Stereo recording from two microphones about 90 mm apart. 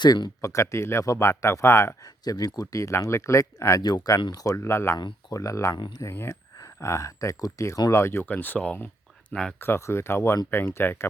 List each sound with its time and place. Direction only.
0.0 s speech: 55° left (ahead or behind)
0.4 s speech: 35° left (ahead or behind)
2.2 s speech: 45° left (ahead or behind)
4.6 s speech: 30° left (ahead or behind)
5.7 s speech: 55° left (ahead or behind)
6.0 s speech: 35° left (ahead or behind); by 9.6 s 5° left (ahead or behind)
9.6 s speech: 25° left (ahead or behind)